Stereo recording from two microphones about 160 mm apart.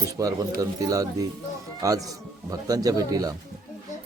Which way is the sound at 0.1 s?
20° right (ahead or behind).